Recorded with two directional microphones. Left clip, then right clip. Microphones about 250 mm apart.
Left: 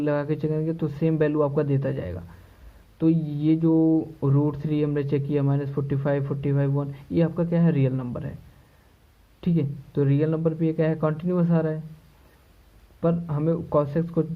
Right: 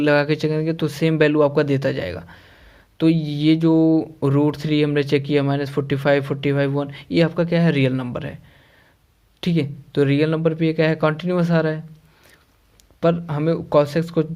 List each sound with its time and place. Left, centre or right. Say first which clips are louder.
0.0 s speech: right 8 dB; right
3.2 s speech: right 5 dB; right
9.4 s speech: right 5 dB; right
13.0 s speech: right 6 dB; right